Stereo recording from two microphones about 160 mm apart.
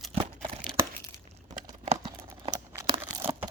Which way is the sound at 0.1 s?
35° right (ahead or behind).